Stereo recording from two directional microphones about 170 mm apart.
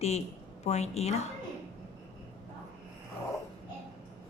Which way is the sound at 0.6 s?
40° left (ahead or behind).